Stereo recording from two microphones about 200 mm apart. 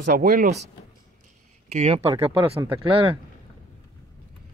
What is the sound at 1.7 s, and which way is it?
Speech, 35° right (ahead or behind).